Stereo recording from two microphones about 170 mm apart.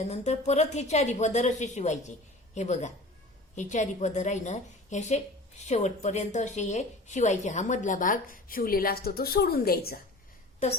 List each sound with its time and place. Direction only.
0.0 s a woman's voice: 40° left (ahead or behind); by 10.0 s 60° left (ahead or behind)